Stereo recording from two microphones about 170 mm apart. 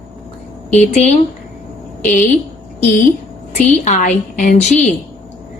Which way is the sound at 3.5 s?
45° left (ahead or behind).